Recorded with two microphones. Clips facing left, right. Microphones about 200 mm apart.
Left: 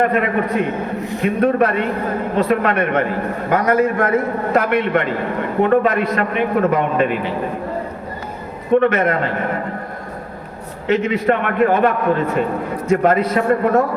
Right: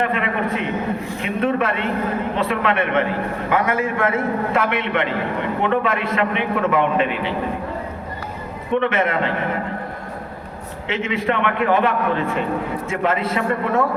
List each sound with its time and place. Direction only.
0.0 s a man's voice: 45° left (ahead or behind)
8.7 s a man's voice: 40° left (ahead or behind)
10.8 s a man's voice: 40° left (ahead or behind)